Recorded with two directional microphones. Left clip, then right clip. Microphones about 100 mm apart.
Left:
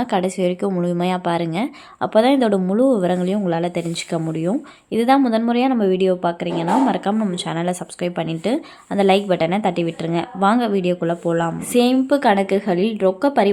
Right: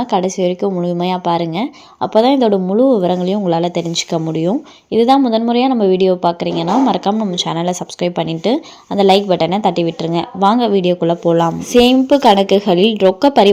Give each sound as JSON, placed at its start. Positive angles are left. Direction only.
{"t": 0.0, "sound": "a woman's voice", "side_deg": -5}